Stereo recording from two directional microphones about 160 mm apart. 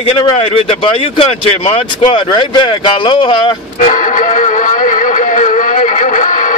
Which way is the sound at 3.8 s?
55° left (ahead or behind).